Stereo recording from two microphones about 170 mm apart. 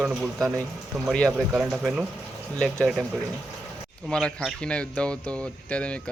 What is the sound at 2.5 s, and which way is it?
Speech, 5° left (ahead or behind).